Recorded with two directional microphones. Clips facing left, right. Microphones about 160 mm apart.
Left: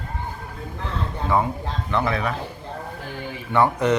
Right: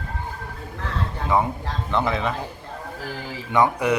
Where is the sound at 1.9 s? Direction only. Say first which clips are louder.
Even; 20° right (ahead or behind).